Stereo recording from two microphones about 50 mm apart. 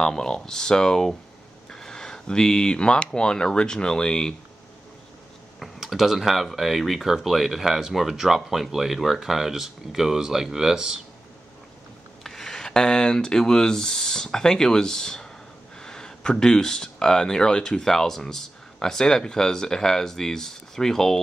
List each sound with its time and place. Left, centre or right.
0.0 s speech: centre
1.7 s a sound: centre
3.1 s speech: centre
5.6 s speech: centre
12.2 s speech: centre